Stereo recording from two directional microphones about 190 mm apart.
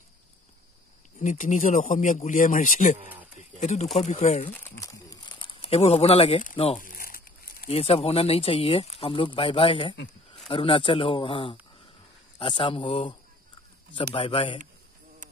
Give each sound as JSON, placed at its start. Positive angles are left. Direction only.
{"t": 1.2, "sound": "speech", "side_deg": 40}
{"t": 4.6, "sound": "crumpling", "side_deg": 15}
{"t": 6.5, "sound": "speech", "side_deg": 30}
{"t": 6.8, "sound": "crumpling", "side_deg": 45}
{"t": 7.7, "sound": "speech", "side_deg": 30}
{"t": 14.1, "sound": "speech", "side_deg": 30}